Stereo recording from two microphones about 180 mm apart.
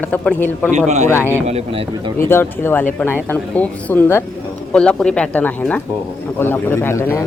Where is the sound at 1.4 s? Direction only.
35° right (ahead or behind).